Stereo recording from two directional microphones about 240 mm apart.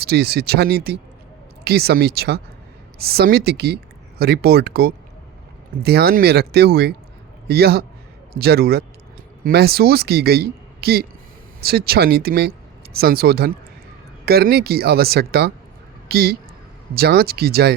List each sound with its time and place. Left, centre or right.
0.0 s a man's voice: right